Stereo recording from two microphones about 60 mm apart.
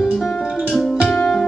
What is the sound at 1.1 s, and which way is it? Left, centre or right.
Music, centre.